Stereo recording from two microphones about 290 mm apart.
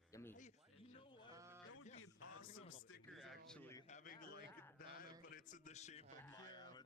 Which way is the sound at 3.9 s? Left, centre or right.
Left.